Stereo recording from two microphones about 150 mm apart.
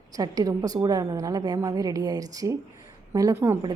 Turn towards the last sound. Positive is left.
turn(degrees=-15)  # may be behind; listen again after turning